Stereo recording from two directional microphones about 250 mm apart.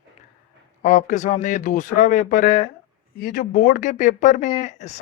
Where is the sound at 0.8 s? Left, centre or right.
Left.